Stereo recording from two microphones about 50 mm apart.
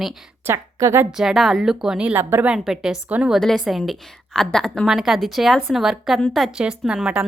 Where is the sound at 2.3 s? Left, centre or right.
Right.